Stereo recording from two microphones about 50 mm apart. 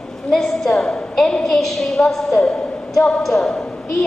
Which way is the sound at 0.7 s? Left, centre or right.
Centre.